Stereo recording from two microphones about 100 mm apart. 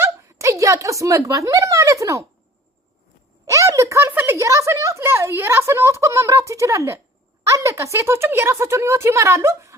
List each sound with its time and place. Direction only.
0.0 s speech: 30° right (ahead or behind)
3.4 s a sound: 30° right (ahead or behind)
4.4 s a woman's voice: 30° right (ahead or behind)